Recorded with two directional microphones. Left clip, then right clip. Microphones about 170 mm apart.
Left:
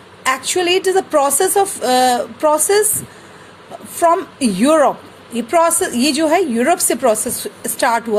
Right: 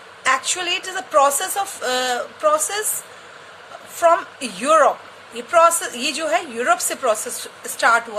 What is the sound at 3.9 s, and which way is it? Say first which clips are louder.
A woman's voice: left 2 dB; 35° left (ahead or behind).